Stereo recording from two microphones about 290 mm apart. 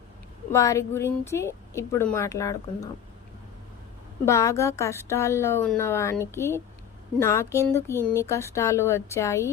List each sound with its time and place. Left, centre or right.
0.5 s a woman's voice: centre
4.3 s a woman's voice: centre